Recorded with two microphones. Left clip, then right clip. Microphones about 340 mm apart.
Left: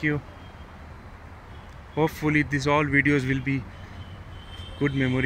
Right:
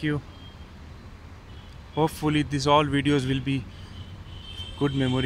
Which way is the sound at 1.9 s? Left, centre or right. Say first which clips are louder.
Left 1 dB; centre.